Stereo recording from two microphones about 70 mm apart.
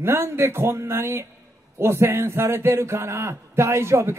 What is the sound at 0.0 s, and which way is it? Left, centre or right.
A man's voice, right.